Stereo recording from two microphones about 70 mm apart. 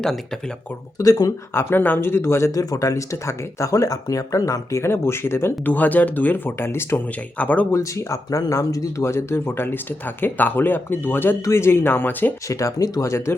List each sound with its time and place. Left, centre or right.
0.9 s speech: left
1.5 s speech: left
2.6 s speech: left
5.7 s speech: left
7.3 s speech: left
7.7 s speech: left
12.5 s speech: left